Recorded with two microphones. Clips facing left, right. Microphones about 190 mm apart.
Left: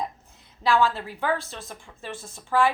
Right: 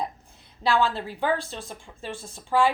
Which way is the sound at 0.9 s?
15° right (ahead or behind).